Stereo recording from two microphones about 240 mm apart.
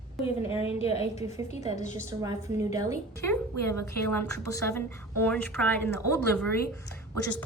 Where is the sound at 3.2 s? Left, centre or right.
Centre.